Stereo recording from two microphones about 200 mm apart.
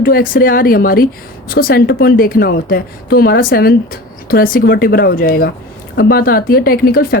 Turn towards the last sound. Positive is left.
turn(degrees=50)  # may be behind; listen again after turning